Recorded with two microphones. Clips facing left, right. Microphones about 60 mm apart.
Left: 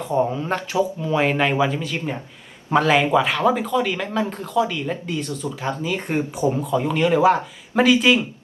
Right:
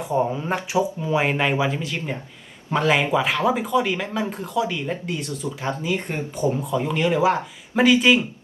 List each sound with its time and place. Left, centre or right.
0.3 s speech: centre
1.4 s speech: centre
6.1 s speech: left
6.6 s speech: centre